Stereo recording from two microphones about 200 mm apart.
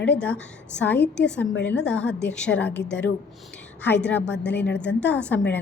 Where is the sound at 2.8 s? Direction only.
60° left (ahead or behind).